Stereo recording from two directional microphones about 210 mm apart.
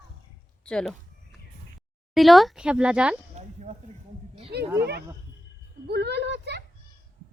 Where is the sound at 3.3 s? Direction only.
30° right (ahead or behind).